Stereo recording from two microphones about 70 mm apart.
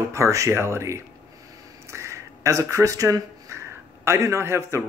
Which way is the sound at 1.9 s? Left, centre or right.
Right.